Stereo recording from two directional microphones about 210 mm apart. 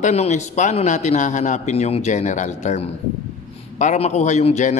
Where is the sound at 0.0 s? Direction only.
30° left (ahead or behind).